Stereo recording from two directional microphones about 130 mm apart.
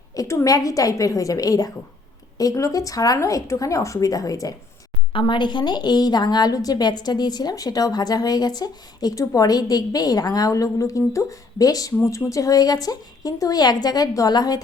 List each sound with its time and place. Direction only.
0.2 s a woman's voice: 25° left (ahead or behind)
5.1 s a woman's voice: 40° left (ahead or behind)